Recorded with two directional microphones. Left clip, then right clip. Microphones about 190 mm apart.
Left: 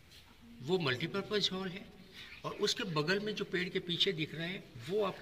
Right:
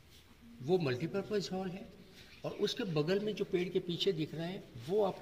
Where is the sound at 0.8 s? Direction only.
40° right (ahead or behind).